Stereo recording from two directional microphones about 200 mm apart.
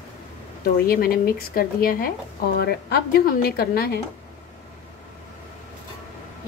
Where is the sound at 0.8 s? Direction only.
50° left (ahead or behind).